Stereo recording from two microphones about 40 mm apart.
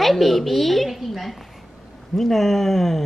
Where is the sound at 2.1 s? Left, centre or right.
Centre.